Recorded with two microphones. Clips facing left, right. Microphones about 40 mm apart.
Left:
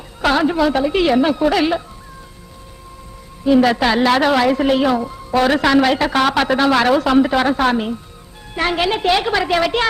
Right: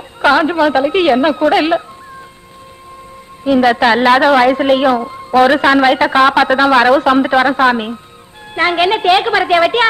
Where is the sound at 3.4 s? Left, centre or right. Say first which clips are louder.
Right 3 dB; right.